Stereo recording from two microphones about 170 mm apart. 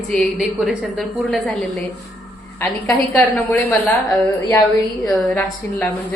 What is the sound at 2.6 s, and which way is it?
A woman's voice, 15° left (ahead or behind).